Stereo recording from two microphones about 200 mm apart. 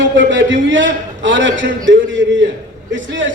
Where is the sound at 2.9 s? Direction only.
65° right (ahead or behind).